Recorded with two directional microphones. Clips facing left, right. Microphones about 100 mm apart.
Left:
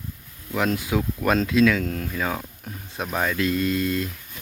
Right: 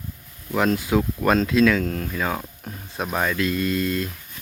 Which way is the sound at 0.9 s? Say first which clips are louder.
Right 5 dB; 15° right (ahead or behind).